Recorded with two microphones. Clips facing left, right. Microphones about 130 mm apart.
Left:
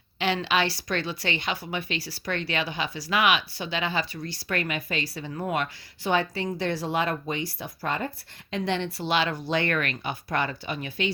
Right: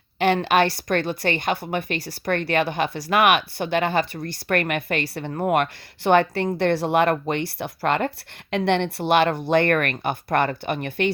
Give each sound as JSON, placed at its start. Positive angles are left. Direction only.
{"t": 0.2, "sound": "a woman's voice", "side_deg": -50}